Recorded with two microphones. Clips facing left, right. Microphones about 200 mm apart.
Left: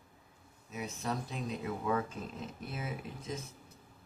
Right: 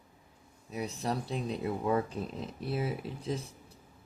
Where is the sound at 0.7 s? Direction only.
35° right (ahead or behind).